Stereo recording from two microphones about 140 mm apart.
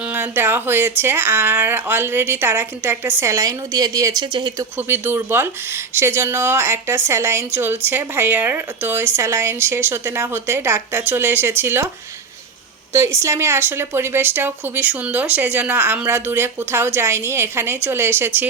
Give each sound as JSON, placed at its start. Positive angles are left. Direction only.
{"t": 0.1, "sound": "speech", "side_deg": -15}
{"t": 4.8, "sound": "speech", "side_deg": -15}
{"t": 12.9, "sound": "speech", "side_deg": -20}